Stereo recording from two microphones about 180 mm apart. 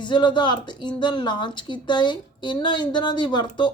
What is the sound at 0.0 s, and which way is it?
A woman's voice, 25° left (ahead or behind).